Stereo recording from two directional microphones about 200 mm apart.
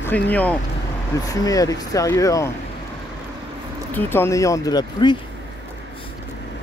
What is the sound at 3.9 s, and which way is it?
Speech, 10° left (ahead or behind).